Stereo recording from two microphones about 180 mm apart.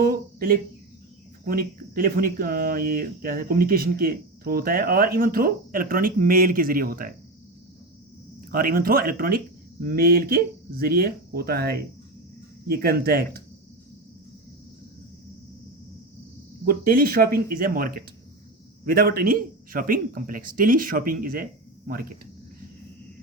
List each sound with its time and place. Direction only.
0.0 s a sound: 55° right (ahead or behind)
1.5 s speech: 55° right (ahead or behind)
8.4 s speech: 55° right (ahead or behind)
16.6 s speech: 55° right (ahead or behind)